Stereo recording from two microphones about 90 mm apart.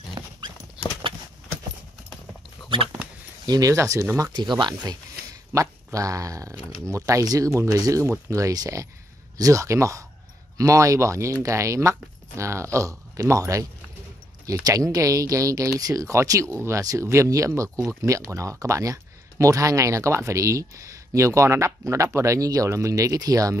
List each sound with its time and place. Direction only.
0.2 s dog: 40° right (ahead or behind)
3.4 s speech: 45° right (ahead or behind)
4.3 s speech: 55° right (ahead or behind); by 23.6 s 40° right (ahead or behind)